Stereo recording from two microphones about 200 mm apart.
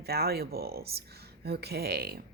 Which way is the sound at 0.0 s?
50° right (ahead or behind).